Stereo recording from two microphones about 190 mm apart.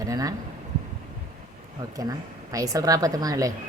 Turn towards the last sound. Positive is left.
turn(degrees=-20)  # may be behind; listen again after turning